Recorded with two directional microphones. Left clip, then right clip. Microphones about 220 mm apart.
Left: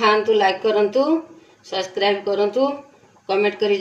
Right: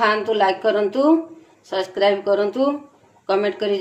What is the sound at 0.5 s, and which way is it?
A woman's voice, 25° right (ahead or behind).